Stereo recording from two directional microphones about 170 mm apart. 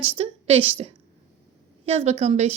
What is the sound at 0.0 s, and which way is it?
Speech, 35° right (ahead or behind).